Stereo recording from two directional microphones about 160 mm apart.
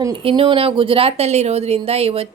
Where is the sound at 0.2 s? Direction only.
35° right (ahead or behind).